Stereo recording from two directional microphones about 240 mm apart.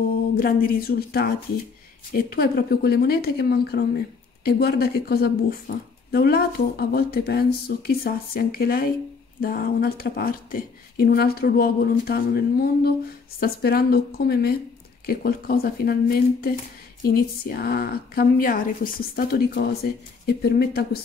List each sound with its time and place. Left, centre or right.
0.4 s speech: left